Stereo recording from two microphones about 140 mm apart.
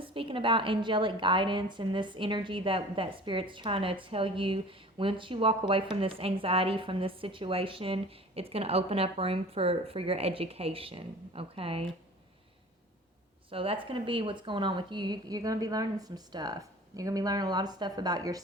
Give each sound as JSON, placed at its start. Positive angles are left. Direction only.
{"t": 0.0, "sound": "a woman's voice", "side_deg": -40}
{"t": 13.5, "sound": "a woman's voice", "side_deg": -40}